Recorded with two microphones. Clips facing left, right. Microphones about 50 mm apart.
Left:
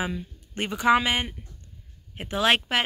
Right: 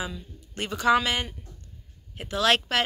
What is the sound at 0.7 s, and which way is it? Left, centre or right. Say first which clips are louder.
Speech: left 1 dB; centre.